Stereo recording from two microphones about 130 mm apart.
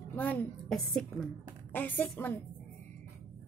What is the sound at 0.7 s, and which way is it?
Speech, centre (ahead or behind).